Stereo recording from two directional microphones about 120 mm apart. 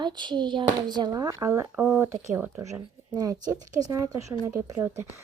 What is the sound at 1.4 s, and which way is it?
Speech, 25° right (ahead or behind).